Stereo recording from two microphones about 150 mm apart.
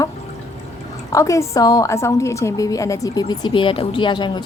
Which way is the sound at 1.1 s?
20° left (ahead or behind).